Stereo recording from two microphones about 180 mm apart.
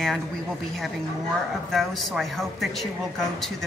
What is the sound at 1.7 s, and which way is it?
A woman's voice, centre (ahead or behind).